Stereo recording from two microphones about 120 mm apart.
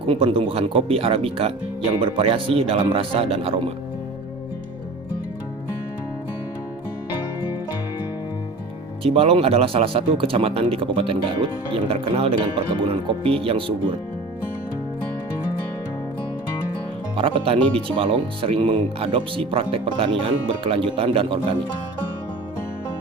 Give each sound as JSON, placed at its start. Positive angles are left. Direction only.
{"t": 0.0, "sound": "speech", "side_deg": -50}
{"t": 9.0, "sound": "speech", "side_deg": -55}
{"t": 17.2, "sound": "speech", "side_deg": -50}